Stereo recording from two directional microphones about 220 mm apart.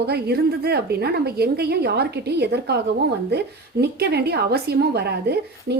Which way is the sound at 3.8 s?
45° right (ahead or behind).